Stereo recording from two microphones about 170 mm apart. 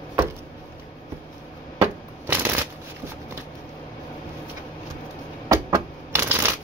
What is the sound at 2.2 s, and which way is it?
Shuffling cards, 15° right (ahead or behind).